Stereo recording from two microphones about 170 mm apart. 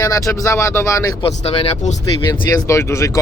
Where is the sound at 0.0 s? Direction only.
20° left (ahead or behind).